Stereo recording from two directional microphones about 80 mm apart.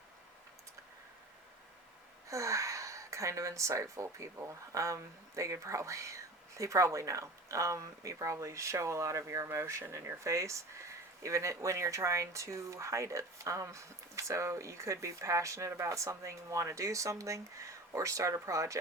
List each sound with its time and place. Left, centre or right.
2.2 s speech: right